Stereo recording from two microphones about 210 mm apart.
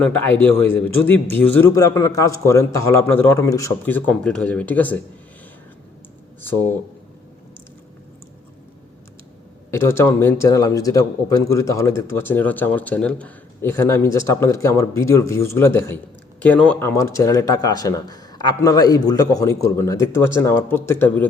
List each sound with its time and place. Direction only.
0.0 s a man's voice: 10° left (ahead or behind)
9.7 s a man's voice: 10° left (ahead or behind)